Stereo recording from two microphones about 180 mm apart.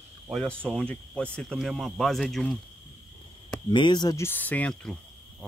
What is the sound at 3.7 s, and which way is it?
Speech, 25° left (ahead or behind).